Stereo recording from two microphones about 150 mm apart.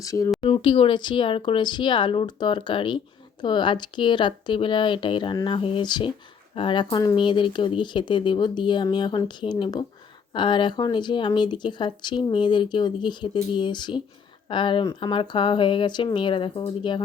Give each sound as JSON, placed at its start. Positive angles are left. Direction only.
{"t": 0.0, "sound": "speech", "side_deg": 20}
{"t": 0.4, "sound": "speech", "side_deg": 35}